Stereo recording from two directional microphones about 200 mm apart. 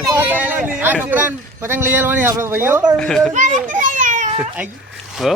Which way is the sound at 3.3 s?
40° right (ahead or behind).